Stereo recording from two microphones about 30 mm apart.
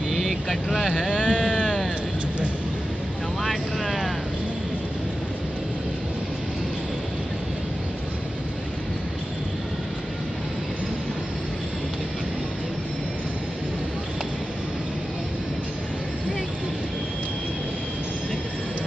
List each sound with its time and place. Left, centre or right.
0.1 s vehicle: centre
1.1 s sheep: left